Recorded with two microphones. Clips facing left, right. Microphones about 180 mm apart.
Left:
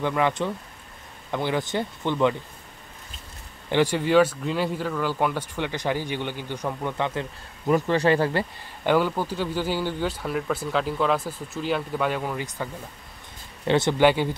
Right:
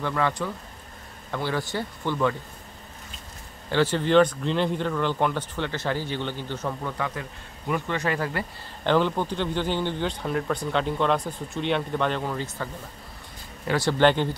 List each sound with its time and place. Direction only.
0.0 s speech: 15° left (ahead or behind)
3.7 s speech: 10° left (ahead or behind)
7.7 s speech: 35° left (ahead or behind)
8.8 s speech: 10° left (ahead or behind)
13.7 s speech: 25° left (ahead or behind)
13.9 s speech: 10° left (ahead or behind)